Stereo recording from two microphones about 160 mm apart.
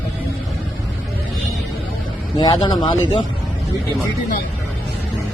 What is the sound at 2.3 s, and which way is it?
Speech, 30° left (ahead or behind).